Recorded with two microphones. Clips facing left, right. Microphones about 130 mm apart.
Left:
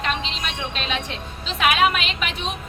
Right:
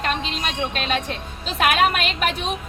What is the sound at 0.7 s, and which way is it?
A woman's voice, 50° right (ahead or behind).